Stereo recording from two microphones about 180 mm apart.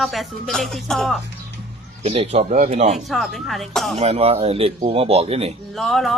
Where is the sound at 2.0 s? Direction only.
35° right (ahead or behind).